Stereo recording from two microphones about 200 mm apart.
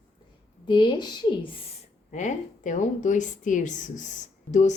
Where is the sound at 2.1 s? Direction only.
40° left (ahead or behind).